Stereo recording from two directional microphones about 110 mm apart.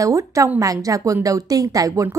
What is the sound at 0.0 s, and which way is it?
A woman's voice, 30° right (ahead or behind).